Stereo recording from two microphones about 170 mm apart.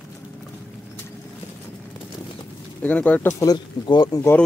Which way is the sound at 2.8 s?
10° left (ahead or behind).